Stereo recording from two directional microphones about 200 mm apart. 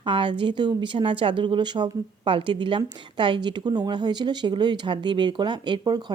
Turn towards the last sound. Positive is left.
turn(degrees=-20)  # may be behind; listen again after turning